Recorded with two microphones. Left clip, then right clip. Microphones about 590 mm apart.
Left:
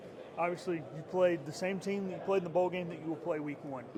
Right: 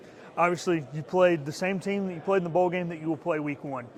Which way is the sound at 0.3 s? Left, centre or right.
Right.